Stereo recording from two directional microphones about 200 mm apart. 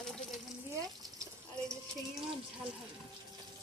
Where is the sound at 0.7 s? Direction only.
15° right (ahead or behind).